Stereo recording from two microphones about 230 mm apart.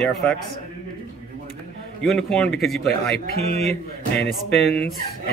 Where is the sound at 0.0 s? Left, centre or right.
Centre.